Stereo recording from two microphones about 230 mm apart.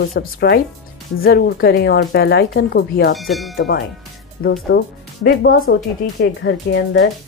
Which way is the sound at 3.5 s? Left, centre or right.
Left.